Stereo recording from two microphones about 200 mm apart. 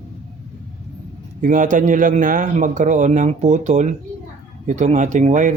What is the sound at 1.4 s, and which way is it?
A man's voice, 40° right (ahead or behind).